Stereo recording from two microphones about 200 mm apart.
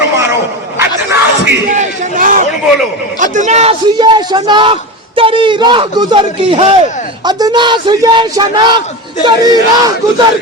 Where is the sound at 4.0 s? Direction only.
20° right (ahead or behind).